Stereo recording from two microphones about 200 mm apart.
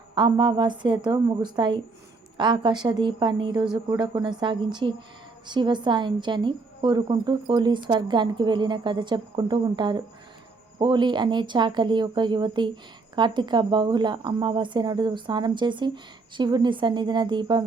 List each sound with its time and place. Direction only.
0.1 s speech: 25° right (ahead or behind)